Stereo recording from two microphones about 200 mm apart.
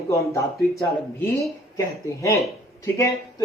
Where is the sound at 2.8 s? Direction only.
15° left (ahead or behind).